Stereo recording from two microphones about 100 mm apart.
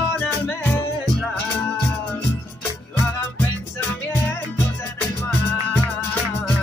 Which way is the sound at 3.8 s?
20° left (ahead or behind).